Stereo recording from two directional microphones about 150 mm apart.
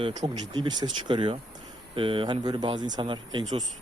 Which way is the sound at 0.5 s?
30° right (ahead or behind).